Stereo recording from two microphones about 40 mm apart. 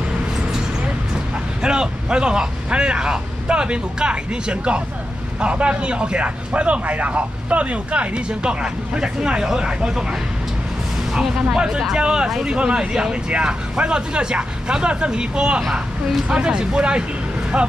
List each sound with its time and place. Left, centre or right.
1.6 s speech: right
8.3 s speech: right
11.1 s speech: centre